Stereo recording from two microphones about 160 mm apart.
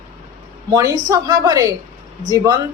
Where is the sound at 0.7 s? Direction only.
20° right (ahead or behind).